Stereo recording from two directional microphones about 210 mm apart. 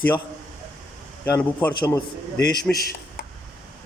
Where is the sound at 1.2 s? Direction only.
10° left (ahead or behind).